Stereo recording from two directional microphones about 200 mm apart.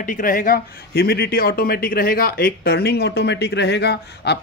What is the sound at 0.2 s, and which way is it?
A man's voice, 45° left (ahead or behind).